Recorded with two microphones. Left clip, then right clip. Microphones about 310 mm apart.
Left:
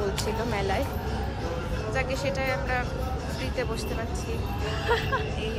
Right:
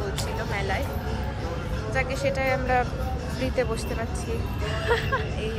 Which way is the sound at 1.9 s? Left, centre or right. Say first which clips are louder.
Right 3 dB; centre.